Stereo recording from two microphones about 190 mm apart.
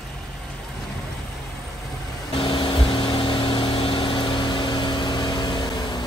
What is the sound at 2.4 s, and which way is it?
Vehicle, 25° left (ahead or behind).